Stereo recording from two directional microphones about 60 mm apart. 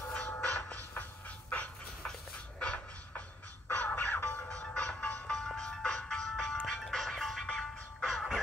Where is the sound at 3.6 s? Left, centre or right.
Left.